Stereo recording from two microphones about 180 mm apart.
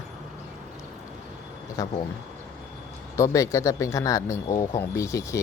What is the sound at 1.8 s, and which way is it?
Speech, 20° left (ahead or behind).